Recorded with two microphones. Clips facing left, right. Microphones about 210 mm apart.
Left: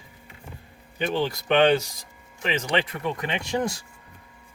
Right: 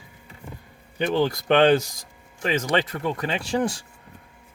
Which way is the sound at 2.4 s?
45° right (ahead or behind).